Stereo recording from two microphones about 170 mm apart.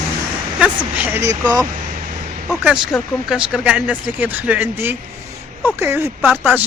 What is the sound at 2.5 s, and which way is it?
Speech, 5° right (ahead or behind).